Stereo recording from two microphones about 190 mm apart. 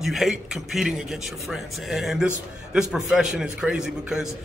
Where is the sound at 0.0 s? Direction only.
Centre (ahead or behind).